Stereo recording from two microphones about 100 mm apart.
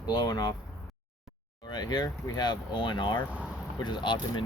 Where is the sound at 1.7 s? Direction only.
45° left (ahead or behind).